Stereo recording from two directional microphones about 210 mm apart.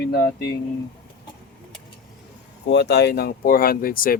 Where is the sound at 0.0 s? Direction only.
50° left (ahead or behind).